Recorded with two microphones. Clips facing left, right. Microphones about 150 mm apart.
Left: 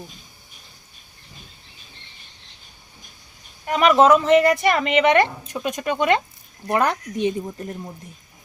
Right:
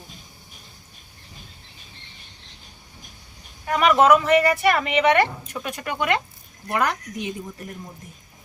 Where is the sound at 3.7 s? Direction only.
25° left (ahead or behind).